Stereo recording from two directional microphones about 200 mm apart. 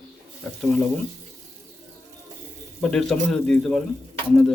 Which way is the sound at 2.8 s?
5° left (ahead or behind).